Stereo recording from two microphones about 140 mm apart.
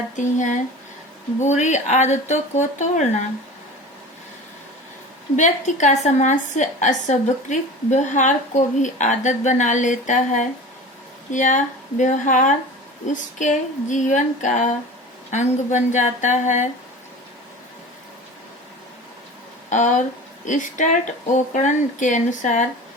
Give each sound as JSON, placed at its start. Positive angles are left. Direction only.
{"t": 0.2, "sound": "a woman's voice", "side_deg": 60}
{"t": 5.4, "sound": "a woman's voice", "side_deg": 60}
{"t": 19.7, "sound": "a woman's voice", "side_deg": 60}